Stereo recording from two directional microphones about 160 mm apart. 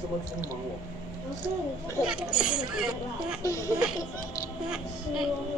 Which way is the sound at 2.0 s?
5° right (ahead or behind).